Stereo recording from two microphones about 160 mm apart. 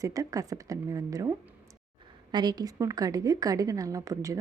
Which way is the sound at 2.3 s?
25° right (ahead or behind).